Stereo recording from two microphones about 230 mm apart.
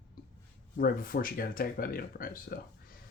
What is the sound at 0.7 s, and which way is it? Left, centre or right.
Speech, left.